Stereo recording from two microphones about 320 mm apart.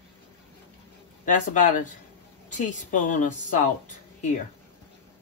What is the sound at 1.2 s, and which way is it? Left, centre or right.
A woman's voice, left.